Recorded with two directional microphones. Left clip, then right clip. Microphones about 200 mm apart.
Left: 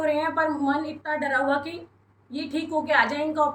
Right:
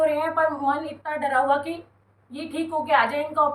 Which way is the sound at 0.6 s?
20° right (ahead or behind).